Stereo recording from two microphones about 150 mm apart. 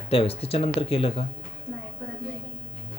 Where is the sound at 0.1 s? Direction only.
40° left (ahead or behind).